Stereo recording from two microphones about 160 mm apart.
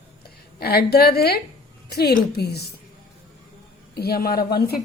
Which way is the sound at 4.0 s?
75° left (ahead or behind).